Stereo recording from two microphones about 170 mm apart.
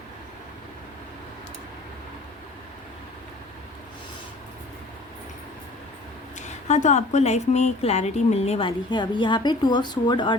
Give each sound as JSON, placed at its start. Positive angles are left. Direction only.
{"t": 6.4, "sound": "a woman's voice", "side_deg": 45}